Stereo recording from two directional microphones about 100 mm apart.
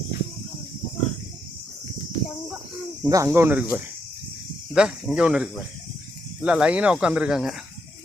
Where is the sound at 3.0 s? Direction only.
35° right (ahead or behind).